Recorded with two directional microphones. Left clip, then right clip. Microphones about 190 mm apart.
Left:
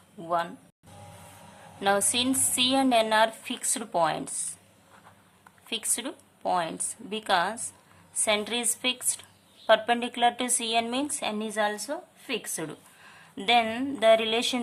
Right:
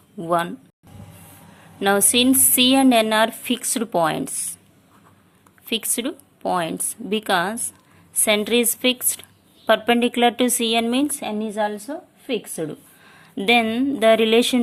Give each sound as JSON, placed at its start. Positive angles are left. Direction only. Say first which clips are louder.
{"t": 0.2, "sound": "a woman's voice", "louder": "right 7 dB", "side_deg": -25}
{"t": 1.8, "sound": "a woman's voice", "louder": "right 7 dB", "side_deg": -30}
{"t": 5.6, "sound": "a woman's voice", "louder": "right 8 dB", "side_deg": -30}